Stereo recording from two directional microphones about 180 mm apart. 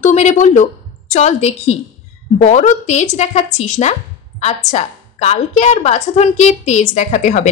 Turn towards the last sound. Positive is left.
turn(degrees=40)  # may be behind; listen again after turning